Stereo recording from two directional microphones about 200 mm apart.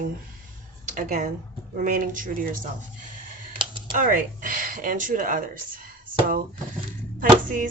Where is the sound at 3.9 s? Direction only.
45° right (ahead or behind).